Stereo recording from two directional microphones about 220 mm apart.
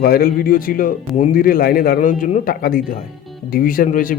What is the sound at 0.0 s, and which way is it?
Speech, 40° left (ahead or behind).